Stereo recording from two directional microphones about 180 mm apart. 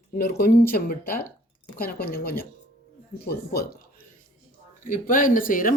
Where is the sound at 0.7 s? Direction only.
55° left (ahead or behind).